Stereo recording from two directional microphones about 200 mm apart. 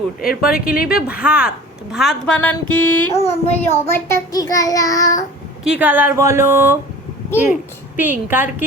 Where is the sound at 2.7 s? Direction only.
15° left (ahead or behind).